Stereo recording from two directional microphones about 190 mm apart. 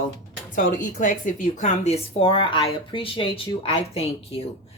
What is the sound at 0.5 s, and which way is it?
Speech, 45° left (ahead or behind).